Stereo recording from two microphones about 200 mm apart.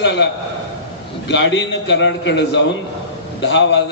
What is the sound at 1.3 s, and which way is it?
A man's voice, 65° left (ahead or behind).